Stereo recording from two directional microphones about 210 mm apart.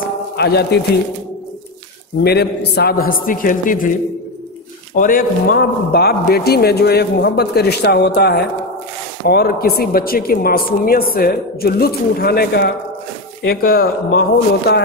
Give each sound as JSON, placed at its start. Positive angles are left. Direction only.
{"t": 0.4, "sound": "a man's voice", "side_deg": 50}
{"t": 2.2, "sound": "a man's voice", "side_deg": 50}
{"t": 4.9, "sound": "a man's voice", "side_deg": 40}